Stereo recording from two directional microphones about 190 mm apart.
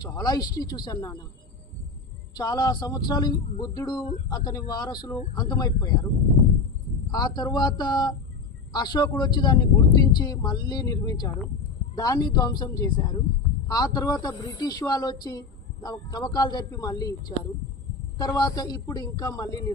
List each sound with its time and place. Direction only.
0.0 s a man's voice: 20° left (ahead or behind)
2.3 s a man's voice: 20° left (ahead or behind)
7.1 s a man's voice: 20° left (ahead or behind)